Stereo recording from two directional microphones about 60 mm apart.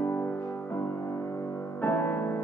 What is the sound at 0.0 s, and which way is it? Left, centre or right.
Music, left.